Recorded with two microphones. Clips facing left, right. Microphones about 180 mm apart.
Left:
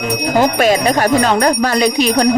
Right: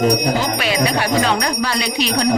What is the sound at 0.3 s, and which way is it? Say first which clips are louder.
Speech: left 7 dB; 45° left (ahead or behind).